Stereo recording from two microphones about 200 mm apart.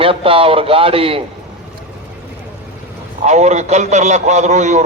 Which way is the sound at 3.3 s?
35° right (ahead or behind).